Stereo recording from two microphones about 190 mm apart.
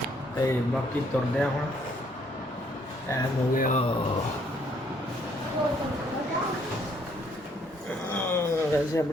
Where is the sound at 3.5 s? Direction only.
45° left (ahead or behind).